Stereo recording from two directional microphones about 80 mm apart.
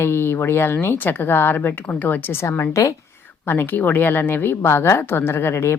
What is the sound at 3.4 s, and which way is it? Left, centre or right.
Speech, left.